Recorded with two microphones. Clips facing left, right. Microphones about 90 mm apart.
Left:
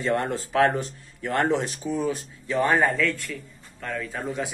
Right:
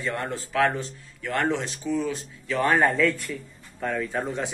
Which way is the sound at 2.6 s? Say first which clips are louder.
Right 1 dB; 5° left (ahead or behind).